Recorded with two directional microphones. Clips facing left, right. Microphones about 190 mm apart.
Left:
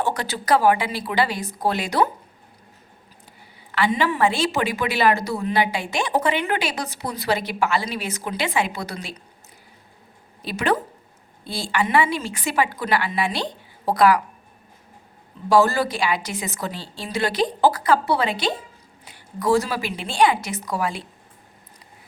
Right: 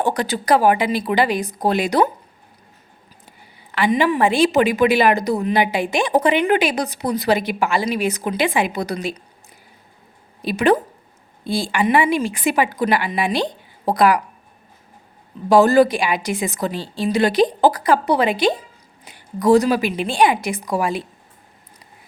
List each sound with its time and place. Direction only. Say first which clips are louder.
0.0 s speech: right 4 dB; 15° right (ahead or behind)
3.7 s speech: right 4 dB; 15° right (ahead or behind)
10.4 s speech: right 6 dB; 15° right (ahead or behind)
15.4 s speech: right 6 dB; 20° right (ahead or behind)